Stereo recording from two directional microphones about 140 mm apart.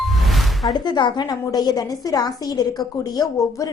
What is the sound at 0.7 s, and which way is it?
A woman's voice, 30° left (ahead or behind).